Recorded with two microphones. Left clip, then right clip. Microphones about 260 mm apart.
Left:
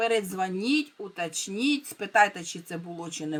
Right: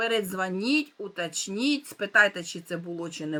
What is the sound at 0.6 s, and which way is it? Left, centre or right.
Speech, left.